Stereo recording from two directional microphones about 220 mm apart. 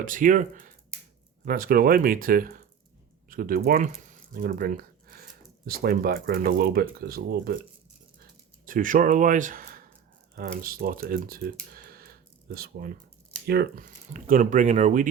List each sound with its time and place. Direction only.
0.0 s speech: 35° right (ahead or behind)
8.6 s speech: 40° right (ahead or behind)